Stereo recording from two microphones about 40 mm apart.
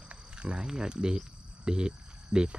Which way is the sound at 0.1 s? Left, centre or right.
Right.